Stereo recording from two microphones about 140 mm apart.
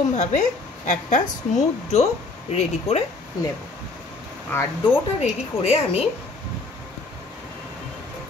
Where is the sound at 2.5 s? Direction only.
50° left (ahead or behind).